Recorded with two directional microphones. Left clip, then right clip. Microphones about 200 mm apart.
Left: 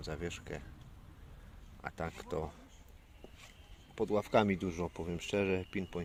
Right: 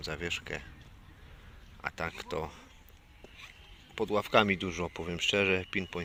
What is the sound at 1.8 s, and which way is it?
Speech, 15° left (ahead or behind).